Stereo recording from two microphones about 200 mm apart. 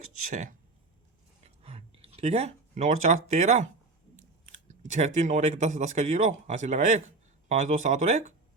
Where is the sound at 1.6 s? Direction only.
30° right (ahead or behind).